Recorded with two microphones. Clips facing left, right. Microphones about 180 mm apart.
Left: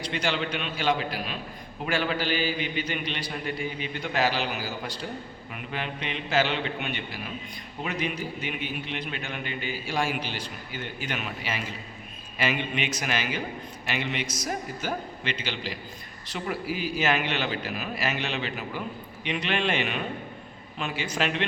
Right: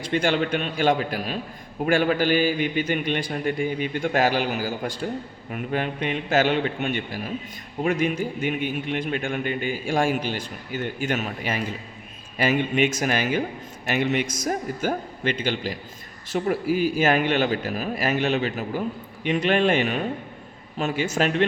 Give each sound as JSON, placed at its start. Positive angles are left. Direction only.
{"t": 0.0, "sound": "a man's voice", "side_deg": -50}